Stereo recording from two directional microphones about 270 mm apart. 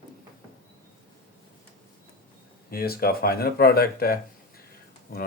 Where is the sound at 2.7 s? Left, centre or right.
Left.